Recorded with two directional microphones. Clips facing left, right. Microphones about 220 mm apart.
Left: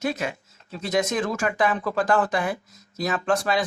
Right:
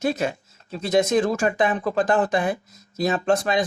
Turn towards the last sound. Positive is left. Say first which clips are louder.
# right 2 dB
turn(degrees=-20)  # may be behind; listen again after turning